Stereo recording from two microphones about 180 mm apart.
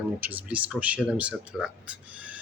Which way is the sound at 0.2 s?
10° right (ahead or behind).